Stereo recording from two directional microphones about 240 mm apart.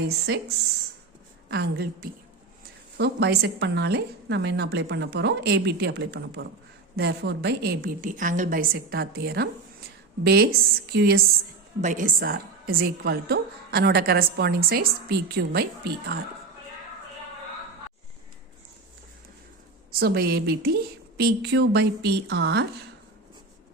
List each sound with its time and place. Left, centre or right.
1.5 s a woman's voice: right
19.9 s a woman's voice: right